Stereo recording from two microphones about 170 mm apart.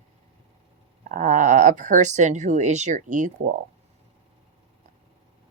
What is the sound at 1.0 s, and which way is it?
Speech, 50° right (ahead or behind).